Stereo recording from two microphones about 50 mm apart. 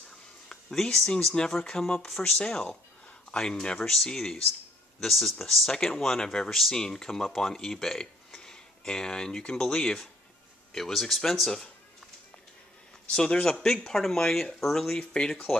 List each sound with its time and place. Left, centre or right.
0.5 s a sound: centre
1.3 s speech: centre
2.0 s speech: centre
2.2 s speech: centre
5.7 s speech: centre
10.7 s speech: centre
13.1 s speech: centre